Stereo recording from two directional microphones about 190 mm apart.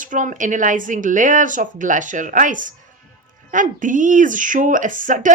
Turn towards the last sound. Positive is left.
turn(degrees=-45)  # may be behind; listen again after turning